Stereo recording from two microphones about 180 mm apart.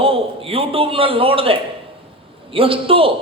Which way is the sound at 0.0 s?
30° right (ahead or behind).